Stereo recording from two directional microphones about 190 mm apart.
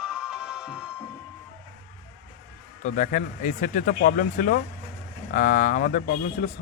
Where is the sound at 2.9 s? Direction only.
40° left (ahead or behind).